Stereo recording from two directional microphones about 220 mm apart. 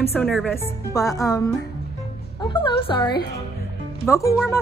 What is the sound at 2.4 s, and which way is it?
A woman's voice, 20° left (ahead or behind).